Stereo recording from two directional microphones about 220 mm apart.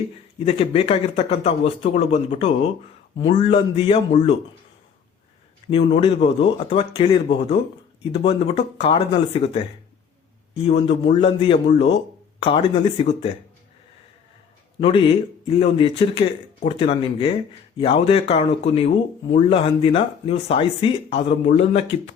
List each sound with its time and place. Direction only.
0.3 s speech: 25° left (ahead or behind)
5.7 s speech: 30° left (ahead or behind)
10.7 s speech: 30° left (ahead or behind)
14.8 s speech: 25° left (ahead or behind)